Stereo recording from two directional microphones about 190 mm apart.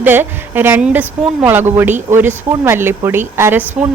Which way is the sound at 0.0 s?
10° right (ahead or behind).